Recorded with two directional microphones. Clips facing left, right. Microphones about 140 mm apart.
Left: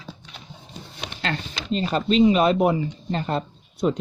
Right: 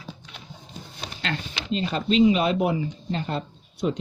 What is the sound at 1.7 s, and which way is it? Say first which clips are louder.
Speech: left 2 dB; 40° left (ahead or behind).